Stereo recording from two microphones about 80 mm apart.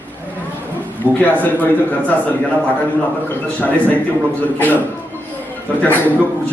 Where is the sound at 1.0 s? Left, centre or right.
Left.